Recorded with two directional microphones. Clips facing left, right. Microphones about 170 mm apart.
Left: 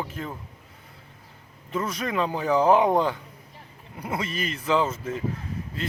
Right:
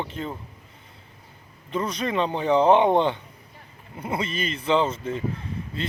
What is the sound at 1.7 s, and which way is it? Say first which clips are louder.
Speech: right 2 dB; 5° left (ahead or behind).